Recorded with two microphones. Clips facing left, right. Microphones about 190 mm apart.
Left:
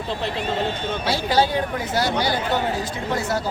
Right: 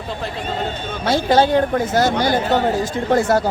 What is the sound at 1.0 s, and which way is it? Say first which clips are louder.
Speech: right 6 dB; 50° right (ahead or behind).